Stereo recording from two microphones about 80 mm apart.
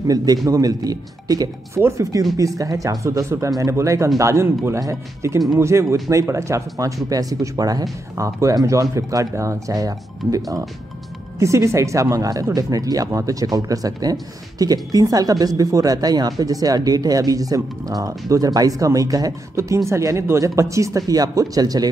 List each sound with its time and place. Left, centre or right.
0.0 s speech: right
1.8 s speech: right
7.1 s speech: right
11.3 s speech: right